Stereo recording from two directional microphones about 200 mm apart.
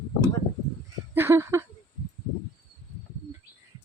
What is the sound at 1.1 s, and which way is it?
Speech, 10° right (ahead or behind).